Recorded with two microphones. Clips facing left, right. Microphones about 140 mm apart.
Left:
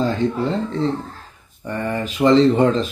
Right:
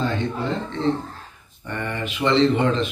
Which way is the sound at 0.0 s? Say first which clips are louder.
Left 5 dB; 35° left (ahead or behind).